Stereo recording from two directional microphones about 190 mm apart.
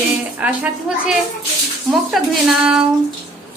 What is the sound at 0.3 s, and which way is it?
A woman's voice, 5° right (ahead or behind).